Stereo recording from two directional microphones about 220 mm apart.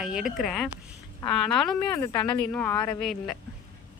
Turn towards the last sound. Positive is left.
turn(degrees=0)  # may be behind; listen again after turning